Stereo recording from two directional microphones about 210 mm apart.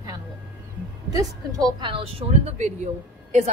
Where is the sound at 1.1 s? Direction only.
15° right (ahead or behind).